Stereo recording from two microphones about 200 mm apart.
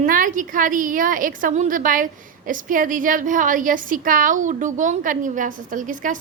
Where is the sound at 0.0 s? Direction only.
40° right (ahead or behind).